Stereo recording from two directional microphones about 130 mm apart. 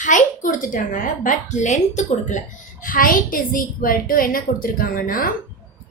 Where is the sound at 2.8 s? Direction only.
90° left.